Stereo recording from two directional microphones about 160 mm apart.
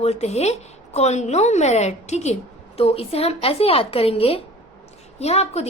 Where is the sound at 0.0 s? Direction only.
45° left (ahead or behind).